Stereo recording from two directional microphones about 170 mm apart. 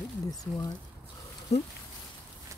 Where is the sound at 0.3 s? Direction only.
20° left (ahead or behind).